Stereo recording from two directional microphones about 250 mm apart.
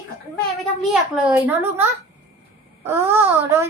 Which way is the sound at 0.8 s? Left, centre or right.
Centre.